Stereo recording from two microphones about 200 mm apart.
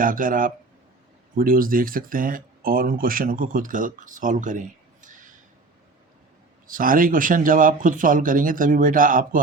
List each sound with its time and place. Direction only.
0.0 s speech: 45° right (ahead or behind)
6.7 s speech: 45° right (ahead or behind)